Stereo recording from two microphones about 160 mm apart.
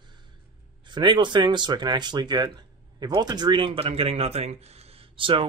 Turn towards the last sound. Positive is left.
turn(degrees=-35)  # may be behind; listen again after turning